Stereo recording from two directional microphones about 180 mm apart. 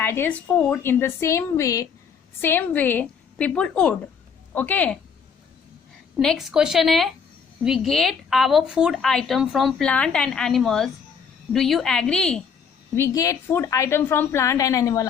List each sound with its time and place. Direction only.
0.0 s a woman's voice: 10° left (ahead or behind)
6.1 s a woman's voice: centre (ahead or behind)
13.0 s a woman's voice: 15° left (ahead or behind)